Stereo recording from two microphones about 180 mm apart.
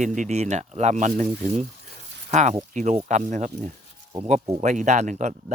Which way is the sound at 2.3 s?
40° right (ahead or behind).